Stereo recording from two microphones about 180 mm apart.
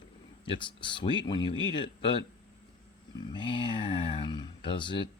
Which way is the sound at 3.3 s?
30° left (ahead or behind).